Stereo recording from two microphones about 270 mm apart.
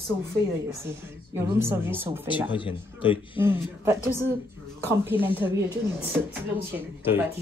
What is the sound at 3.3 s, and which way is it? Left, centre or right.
Speech, centre.